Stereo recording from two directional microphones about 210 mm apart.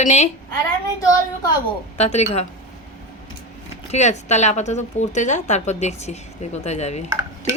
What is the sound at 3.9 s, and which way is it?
A woman's voice, 35° left (ahead or behind).